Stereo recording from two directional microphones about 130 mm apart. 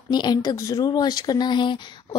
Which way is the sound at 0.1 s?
30° left (ahead or behind).